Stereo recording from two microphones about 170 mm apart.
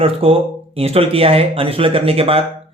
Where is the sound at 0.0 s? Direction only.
35° right (ahead or behind).